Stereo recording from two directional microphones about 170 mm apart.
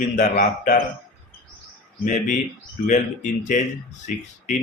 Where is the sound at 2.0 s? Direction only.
50° left (ahead or behind).